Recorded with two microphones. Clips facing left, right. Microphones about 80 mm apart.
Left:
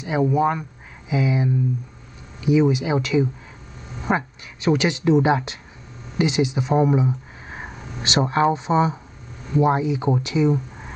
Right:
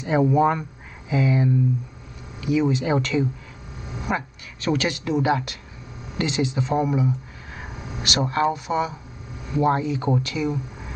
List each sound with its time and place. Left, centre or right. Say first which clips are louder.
0.0 s speech: right 1 dB; centre
2.8 s speech: left 1 dB; centre
4.1 s speech: left 4 dB; centre
9.6 s speech: left 2 dB; centre